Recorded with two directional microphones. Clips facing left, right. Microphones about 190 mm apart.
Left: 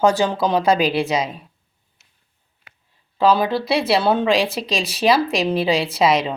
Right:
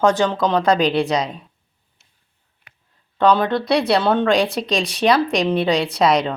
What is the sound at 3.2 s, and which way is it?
A woman's voice, 5° left (ahead or behind).